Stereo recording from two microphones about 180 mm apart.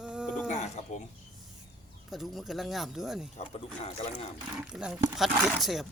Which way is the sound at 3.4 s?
35° left (ahead or behind).